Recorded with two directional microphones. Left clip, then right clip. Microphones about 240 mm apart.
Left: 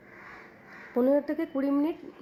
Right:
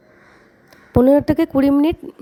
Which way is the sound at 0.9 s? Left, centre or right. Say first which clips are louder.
Right 12 dB; right.